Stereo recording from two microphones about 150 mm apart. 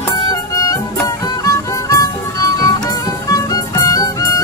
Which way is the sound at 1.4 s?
20° left (ahead or behind).